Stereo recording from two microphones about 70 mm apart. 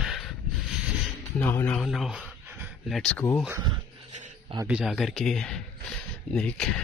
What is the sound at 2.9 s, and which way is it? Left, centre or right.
Speech, centre.